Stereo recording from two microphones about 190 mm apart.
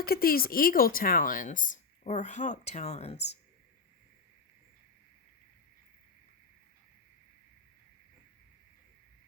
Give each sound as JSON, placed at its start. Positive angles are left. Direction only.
{"t": 0.0, "sound": "speech", "side_deg": 50}